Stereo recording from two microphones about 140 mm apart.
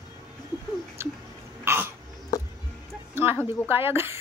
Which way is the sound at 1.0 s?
15° right (ahead or behind).